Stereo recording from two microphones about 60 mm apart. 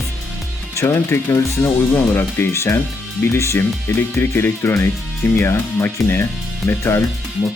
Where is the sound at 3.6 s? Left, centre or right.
Left.